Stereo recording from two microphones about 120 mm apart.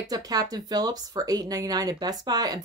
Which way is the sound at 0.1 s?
30° right (ahead or behind).